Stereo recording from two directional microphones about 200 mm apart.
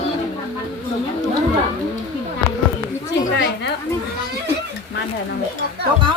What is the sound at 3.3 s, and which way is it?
Speech, 60° left (ahead or behind).